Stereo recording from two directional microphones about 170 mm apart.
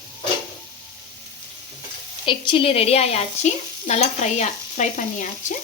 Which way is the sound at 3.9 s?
45° left (ahead or behind).